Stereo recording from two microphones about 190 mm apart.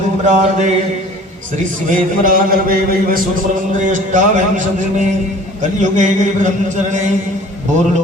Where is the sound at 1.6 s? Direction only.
45° right (ahead or behind).